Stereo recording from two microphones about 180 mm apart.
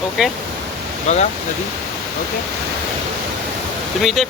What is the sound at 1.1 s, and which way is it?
Speech, 40° left (ahead or behind).